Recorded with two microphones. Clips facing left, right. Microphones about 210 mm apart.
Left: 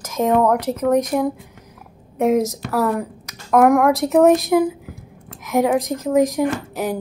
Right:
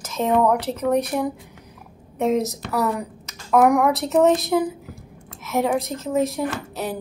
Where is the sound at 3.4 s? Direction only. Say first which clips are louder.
Left 3 dB; 10° left (ahead or behind).